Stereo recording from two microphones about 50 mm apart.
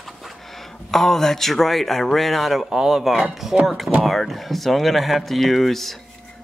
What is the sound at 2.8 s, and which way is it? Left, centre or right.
A man's voice, centre.